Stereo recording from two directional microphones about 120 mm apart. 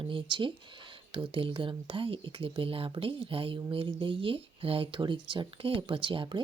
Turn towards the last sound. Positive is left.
turn(degrees=-45)  # may be behind; listen again after turning